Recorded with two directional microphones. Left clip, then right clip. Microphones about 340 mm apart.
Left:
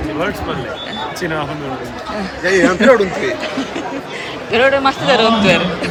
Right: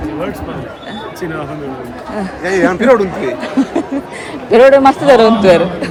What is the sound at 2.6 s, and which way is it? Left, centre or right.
Speech, right.